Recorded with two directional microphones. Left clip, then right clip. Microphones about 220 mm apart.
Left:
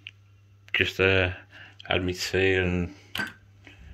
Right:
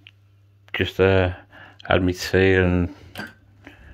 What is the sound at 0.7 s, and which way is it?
Speech, 20° right (ahead or behind).